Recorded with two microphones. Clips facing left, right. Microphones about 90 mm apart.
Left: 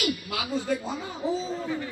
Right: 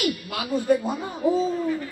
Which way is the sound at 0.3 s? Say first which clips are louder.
Right 6 dB; 55° right (ahead or behind).